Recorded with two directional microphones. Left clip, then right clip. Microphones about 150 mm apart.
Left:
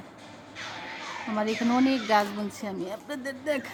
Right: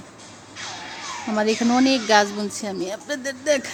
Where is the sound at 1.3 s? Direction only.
25° right (ahead or behind).